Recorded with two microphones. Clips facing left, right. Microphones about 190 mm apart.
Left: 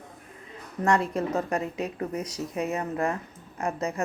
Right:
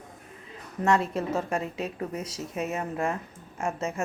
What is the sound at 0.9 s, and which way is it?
A woman's voice, 25° right (ahead or behind).